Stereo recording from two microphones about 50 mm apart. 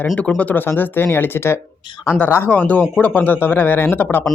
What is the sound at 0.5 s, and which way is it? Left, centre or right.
Speech, left.